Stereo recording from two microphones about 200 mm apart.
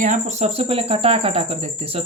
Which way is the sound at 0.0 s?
35° right (ahead or behind).